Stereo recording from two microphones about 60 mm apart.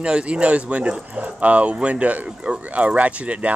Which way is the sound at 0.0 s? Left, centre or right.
Centre.